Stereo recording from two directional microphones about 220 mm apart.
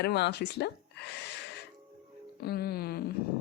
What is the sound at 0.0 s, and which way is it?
Speech, 50° left (ahead or behind).